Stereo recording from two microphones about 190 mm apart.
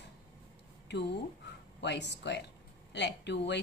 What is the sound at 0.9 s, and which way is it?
A woman's voice, 65° left (ahead or behind).